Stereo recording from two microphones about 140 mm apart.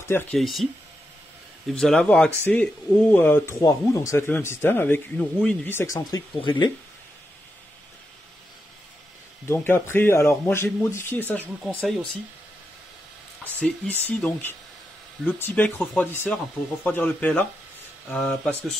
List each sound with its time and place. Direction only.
0.1 s a man's voice: 15° left (ahead or behind)
0.4 s speech: centre (ahead or behind)
1.7 s a man's voice: 5° left (ahead or behind)
3.6 s a man's voice: 25° left (ahead or behind)
5.8 s speech: 25° left (ahead or behind)
9.5 s a man's voice: 15° left (ahead or behind)
13.6 s a man's voice: 10° left (ahead or behind)